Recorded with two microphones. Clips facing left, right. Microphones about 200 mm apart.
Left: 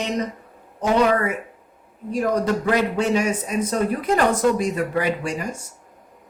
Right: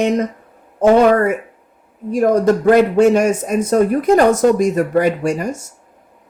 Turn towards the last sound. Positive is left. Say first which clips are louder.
# right 7 dB
turn(degrees=-45)  # may be behind; listen again after turning